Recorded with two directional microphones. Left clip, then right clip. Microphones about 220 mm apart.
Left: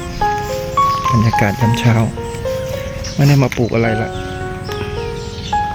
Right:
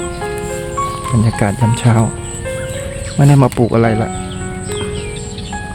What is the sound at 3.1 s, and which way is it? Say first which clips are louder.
Speech: right 3 dB; 20° right (ahead or behind).